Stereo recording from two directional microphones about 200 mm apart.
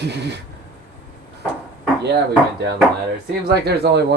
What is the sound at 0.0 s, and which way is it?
Speech, 60° right (ahead or behind).